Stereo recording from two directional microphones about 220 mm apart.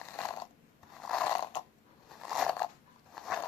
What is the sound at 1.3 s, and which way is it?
Snoring, 15° left (ahead or behind).